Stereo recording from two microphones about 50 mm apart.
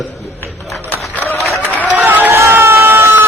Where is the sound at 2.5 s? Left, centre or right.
Right.